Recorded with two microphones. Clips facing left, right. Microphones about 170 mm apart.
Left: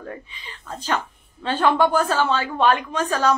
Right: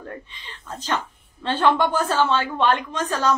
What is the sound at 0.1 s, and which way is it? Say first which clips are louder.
Speech: left 1 dB; 10° left (ahead or behind).